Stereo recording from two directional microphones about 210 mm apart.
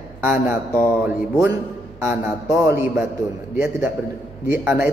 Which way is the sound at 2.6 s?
15° right (ahead or behind).